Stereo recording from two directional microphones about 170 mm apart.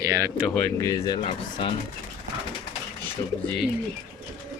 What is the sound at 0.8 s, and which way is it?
Speech, 20° left (ahead or behind).